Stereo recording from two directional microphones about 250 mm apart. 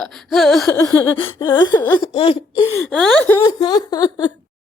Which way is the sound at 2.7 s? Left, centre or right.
Centre.